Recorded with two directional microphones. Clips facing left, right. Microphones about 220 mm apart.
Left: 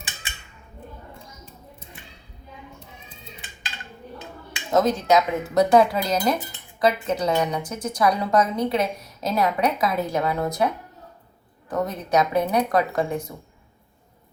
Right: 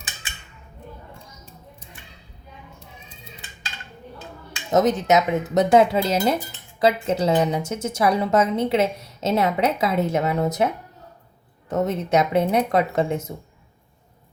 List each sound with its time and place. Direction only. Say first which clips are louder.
4.7 s a woman's voice: right 1 dB; 20° right (ahead or behind)
11.7 s a woman's voice: right 2 dB; 25° right (ahead or behind)